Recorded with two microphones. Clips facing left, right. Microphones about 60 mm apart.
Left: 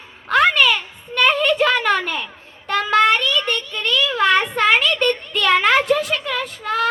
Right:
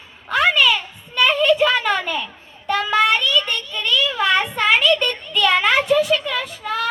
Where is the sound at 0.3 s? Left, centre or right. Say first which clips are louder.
Left 1 dB; left.